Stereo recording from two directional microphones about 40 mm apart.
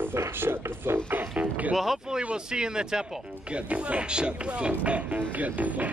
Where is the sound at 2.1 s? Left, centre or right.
Centre.